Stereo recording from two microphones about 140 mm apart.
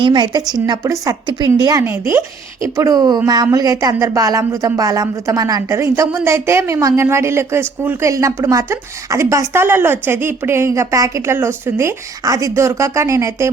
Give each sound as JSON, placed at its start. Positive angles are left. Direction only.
{"t": 0.0, "sound": "a woman's voice", "side_deg": -30}